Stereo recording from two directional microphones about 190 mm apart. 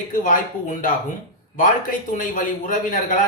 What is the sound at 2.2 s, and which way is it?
Speech, 45° left (ahead or behind).